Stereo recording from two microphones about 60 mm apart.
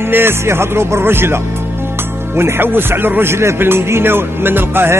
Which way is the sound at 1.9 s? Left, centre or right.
Right.